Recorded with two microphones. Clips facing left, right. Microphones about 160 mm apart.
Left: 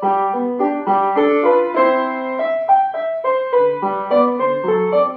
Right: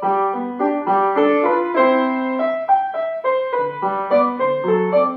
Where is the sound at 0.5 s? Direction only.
15° left (ahead or behind).